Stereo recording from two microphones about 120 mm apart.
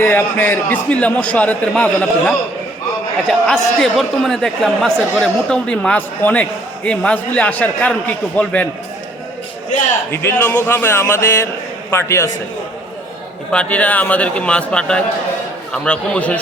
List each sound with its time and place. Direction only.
0.0 s a man's voice: 15° left (ahead or behind)
10.1 s speech: 20° left (ahead or behind)
13.5 s a man's voice: 10° left (ahead or behind)